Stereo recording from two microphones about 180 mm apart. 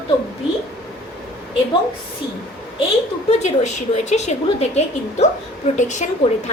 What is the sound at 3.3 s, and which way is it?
A woman's voice, 40° left (ahead or behind).